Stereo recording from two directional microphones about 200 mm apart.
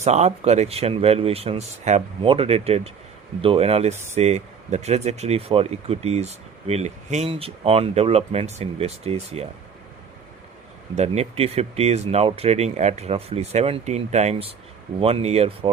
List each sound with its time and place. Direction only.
0.0 s speech: 35° right (ahead or behind)
10.9 s speech: 35° right (ahead or behind)